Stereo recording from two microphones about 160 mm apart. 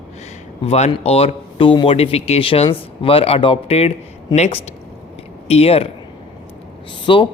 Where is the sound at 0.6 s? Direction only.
45° left (ahead or behind).